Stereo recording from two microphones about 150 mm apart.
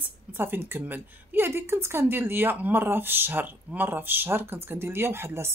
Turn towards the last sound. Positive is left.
turn(degrees=-15)  # may be behind; listen again after turning